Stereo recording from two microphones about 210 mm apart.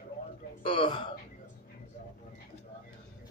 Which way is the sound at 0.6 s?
25° left (ahead or behind).